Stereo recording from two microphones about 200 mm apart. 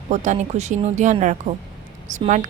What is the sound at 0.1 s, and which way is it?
A woman's voice, 35° right (ahead or behind).